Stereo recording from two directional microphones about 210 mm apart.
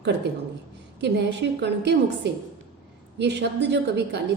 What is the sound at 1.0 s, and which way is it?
A woman's voice, 55° right (ahead or behind).